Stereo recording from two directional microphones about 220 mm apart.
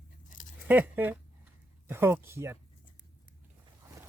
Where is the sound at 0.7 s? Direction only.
10° right (ahead or behind).